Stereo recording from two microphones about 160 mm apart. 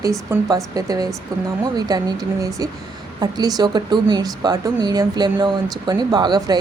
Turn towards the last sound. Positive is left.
turn(degrees=-25)  # may be behind; listen again after turning